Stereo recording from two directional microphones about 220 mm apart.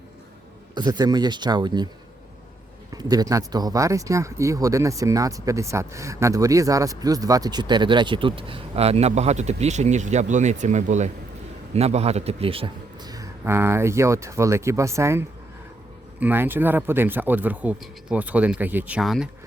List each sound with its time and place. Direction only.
0.7 s a man's voice: 20° right (ahead or behind)
2.9 s speech: 15° right (ahead or behind)
16.2 s speech: 10° right (ahead or behind)